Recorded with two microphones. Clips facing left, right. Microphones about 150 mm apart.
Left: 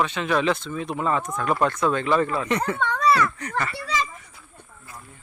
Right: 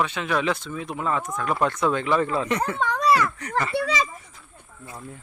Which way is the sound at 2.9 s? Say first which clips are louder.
Even; 20° right (ahead or behind).